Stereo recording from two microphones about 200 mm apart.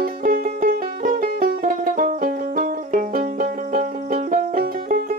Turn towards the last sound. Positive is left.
turn(degrees=-45)  # may be behind; listen again after turning